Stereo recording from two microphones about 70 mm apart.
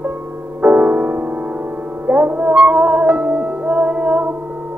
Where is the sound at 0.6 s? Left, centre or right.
Right.